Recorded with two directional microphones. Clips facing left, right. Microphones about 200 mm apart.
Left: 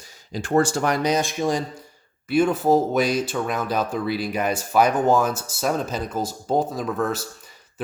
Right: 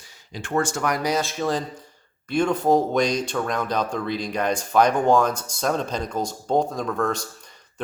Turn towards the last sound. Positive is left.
turn(degrees=5)  # may be behind; listen again after turning